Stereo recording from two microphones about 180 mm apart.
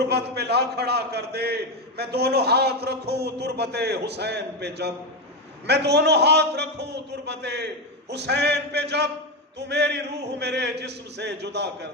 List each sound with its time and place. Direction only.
0.1 s a man's voice: 65° right (ahead or behind)